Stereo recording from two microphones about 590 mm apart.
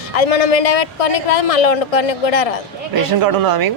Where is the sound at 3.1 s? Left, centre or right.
Right.